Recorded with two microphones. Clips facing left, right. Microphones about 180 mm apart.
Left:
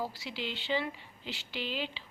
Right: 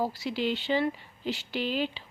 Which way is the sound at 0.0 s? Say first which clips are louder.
Right 8 dB; 45° right (ahead or behind).